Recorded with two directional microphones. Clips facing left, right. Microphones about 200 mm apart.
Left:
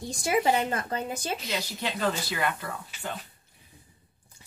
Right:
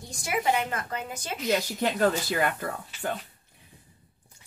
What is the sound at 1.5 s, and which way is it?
Speech, 50° right (ahead or behind).